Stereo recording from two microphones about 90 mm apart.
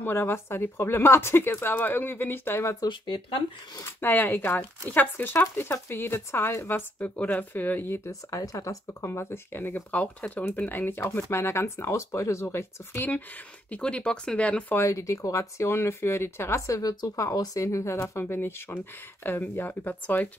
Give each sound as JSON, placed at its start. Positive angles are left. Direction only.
{"t": 0.0, "sound": "speech", "side_deg": 25}
{"t": 2.9, "sound": "speech", "side_deg": 65}
{"t": 3.8, "sound": "speech", "side_deg": 20}
{"t": 13.7, "sound": "speech", "side_deg": 10}
{"t": 14.7, "sound": "speech", "side_deg": 30}
{"t": 18.2, "sound": "speech", "side_deg": 25}